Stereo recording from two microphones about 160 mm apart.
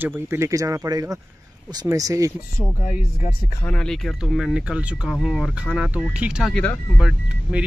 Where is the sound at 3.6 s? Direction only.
5° left (ahead or behind).